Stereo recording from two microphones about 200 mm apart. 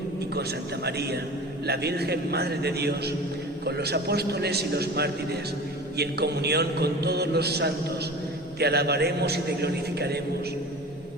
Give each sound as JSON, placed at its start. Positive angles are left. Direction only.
{"t": 0.9, "sound": "a man's voice", "side_deg": -55}